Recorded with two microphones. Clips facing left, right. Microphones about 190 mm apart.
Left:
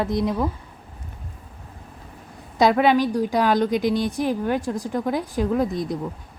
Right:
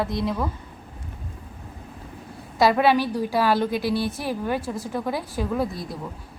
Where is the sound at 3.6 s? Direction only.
15° left (ahead or behind).